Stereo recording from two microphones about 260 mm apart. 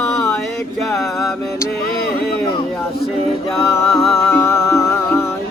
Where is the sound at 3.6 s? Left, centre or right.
Centre.